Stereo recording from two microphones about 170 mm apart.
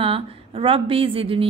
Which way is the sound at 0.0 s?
30° right (ahead or behind).